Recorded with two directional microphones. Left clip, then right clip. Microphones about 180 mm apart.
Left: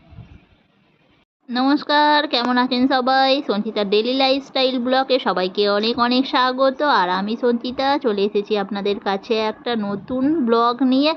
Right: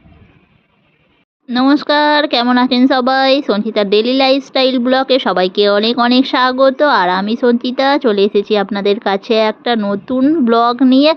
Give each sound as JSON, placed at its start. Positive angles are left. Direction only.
{"t": 1.5, "sound": "speech", "side_deg": -35}